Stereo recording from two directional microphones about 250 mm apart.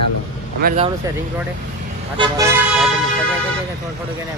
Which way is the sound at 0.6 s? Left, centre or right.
Right.